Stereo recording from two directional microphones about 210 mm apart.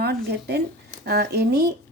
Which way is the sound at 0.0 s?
50° right (ahead or behind).